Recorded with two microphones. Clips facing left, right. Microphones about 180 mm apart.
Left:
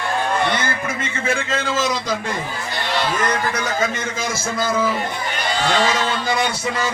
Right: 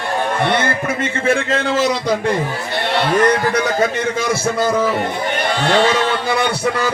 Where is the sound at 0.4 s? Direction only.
60° right (ahead or behind).